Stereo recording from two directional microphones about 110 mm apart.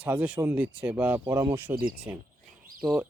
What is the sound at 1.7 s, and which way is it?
Speech, 35° right (ahead or behind).